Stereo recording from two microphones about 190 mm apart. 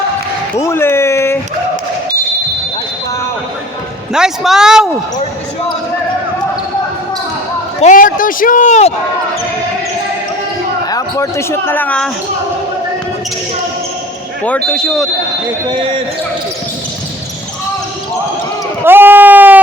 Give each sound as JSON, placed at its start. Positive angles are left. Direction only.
{"t": 0.6, "sound": "speech", "side_deg": 15}
{"t": 4.1, "sound": "speech", "side_deg": -5}
{"t": 7.8, "sound": "a man's voice", "side_deg": 40}
{"t": 10.8, "sound": "speech", "side_deg": 20}
{"t": 14.4, "sound": "speech", "side_deg": 5}
{"t": 15.7, "sound": "speech", "side_deg": -25}
{"t": 18.9, "sound": "speech", "side_deg": -10}